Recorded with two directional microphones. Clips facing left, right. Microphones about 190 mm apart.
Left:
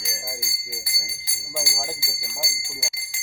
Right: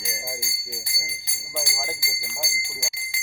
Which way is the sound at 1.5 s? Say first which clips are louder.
Even; 5° left (ahead or behind).